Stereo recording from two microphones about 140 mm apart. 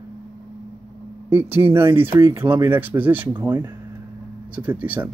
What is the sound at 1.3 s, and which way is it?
Speech, 15° right (ahead or behind).